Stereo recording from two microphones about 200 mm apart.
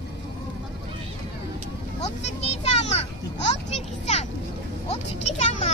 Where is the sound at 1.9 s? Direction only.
35° left (ahead or behind).